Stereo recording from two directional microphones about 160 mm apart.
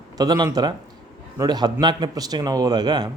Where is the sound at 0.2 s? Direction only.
25° right (ahead or behind).